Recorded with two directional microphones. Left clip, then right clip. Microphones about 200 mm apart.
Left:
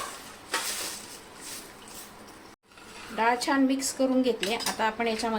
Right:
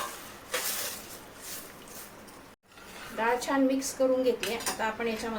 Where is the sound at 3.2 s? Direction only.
50° left (ahead or behind).